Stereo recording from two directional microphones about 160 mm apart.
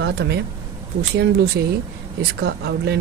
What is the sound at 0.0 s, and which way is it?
Speech, 90° right.